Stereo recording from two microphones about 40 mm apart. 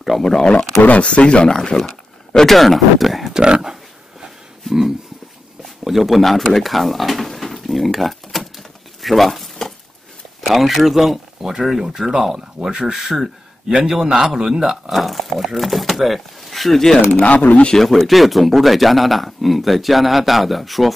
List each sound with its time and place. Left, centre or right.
0.2 s speech: centre
0.8 s speech: left
1.8 s a sound: centre
3.3 s speech: right
4.6 s a sound: centre
5.9 s speech: centre
9.0 s a sound: centre
10.4 s a man's voice: centre
15.0 s speech: centre
17.2 s speech: left
17.7 s speech: centre